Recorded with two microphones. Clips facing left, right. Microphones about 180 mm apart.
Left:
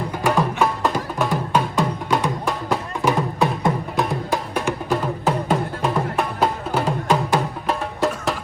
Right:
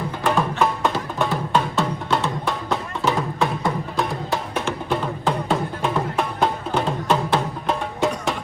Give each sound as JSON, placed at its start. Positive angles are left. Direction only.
{"t": 0.6, "sound": "music", "side_deg": 0}
{"t": 4.5, "sound": "music", "side_deg": 5}